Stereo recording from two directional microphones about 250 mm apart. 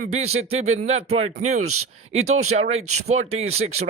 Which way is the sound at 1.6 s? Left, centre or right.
Right.